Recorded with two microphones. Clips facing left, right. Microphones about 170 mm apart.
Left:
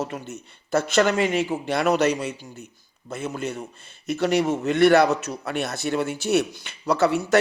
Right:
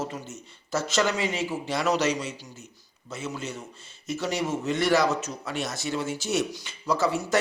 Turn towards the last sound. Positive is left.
turn(degrees=65)  # may be behind; listen again after turning